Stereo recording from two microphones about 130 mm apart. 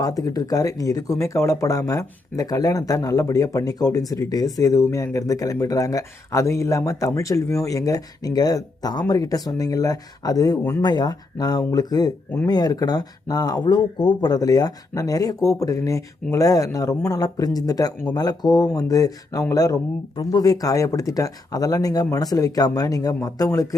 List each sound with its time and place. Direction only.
0.0 s speech: 30° left (ahead or behind)
10.8 s speech: 30° left (ahead or behind)